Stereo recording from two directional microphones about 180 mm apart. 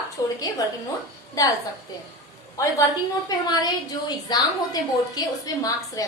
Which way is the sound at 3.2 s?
20° left (ahead or behind).